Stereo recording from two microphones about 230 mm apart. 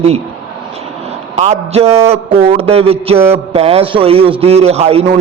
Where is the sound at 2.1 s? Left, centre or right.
Right.